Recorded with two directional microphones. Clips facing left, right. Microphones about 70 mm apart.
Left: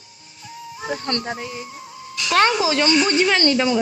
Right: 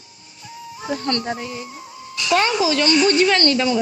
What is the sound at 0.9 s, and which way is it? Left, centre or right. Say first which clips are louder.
Speech: right 2 dB; centre.